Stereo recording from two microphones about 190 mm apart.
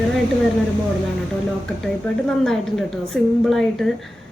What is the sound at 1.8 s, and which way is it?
A woman's voice, centre (ahead or behind).